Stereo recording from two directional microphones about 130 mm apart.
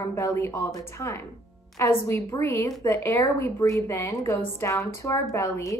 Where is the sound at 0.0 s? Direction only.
20° left (ahead or behind).